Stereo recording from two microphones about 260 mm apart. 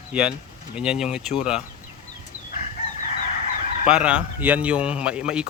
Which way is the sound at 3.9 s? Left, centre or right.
Centre.